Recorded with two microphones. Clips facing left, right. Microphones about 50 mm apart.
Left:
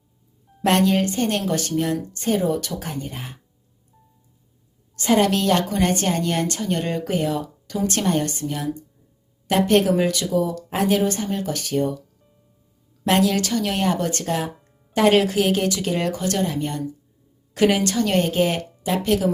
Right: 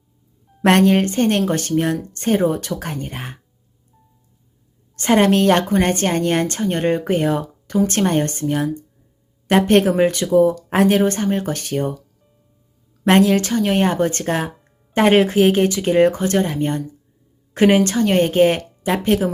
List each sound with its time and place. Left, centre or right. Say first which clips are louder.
0.6 s a woman's voice: right 4 dB; right
4.9 s a woman's voice: right 4 dB; right
13.1 s a woman's voice: right 5 dB; right